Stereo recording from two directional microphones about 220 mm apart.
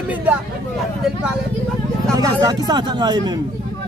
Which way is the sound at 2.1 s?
20° right (ahead or behind).